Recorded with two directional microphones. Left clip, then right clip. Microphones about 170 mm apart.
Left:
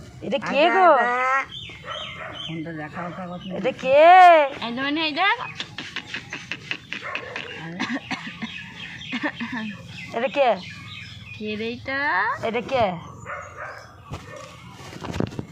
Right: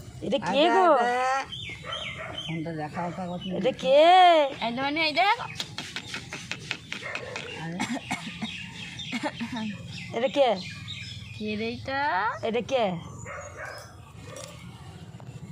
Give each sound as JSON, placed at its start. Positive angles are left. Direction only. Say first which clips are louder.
{"t": 0.3, "sound": "speech", "louder": "left 3 dB", "side_deg": -30}
{"t": 2.6, "sound": "speech", "louder": "even", "side_deg": -40}
{"t": 4.6, "sound": "a sound", "louder": "left 2 dB", "side_deg": -65}
{"t": 7.8, "sound": "cough", "louder": "left 4 dB", "side_deg": -65}
{"t": 9.0, "sound": "speech", "louder": "left 5 dB", "side_deg": -65}
{"t": 10.1, "sound": "speech", "louder": "left 3 dB", "side_deg": -30}
{"t": 11.4, "sound": "speech", "louder": "left 3 dB", "side_deg": -65}
{"t": 12.4, "sound": "speech", "louder": "left 4 dB", "side_deg": -35}